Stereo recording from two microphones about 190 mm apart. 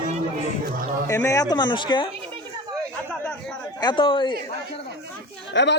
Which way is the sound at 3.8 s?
25° left (ahead or behind).